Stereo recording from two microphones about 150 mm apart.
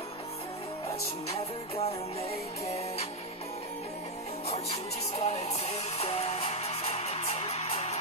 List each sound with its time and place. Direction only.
1.3 s music: 45° left (ahead or behind)
4.5 s music: 45° left (ahead or behind)